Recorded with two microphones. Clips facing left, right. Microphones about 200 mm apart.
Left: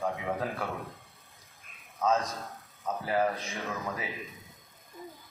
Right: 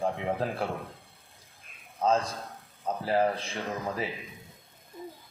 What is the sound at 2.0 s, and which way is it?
Speech, 30° right (ahead or behind).